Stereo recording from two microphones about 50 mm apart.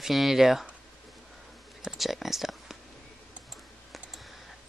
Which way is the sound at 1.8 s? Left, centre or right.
Centre.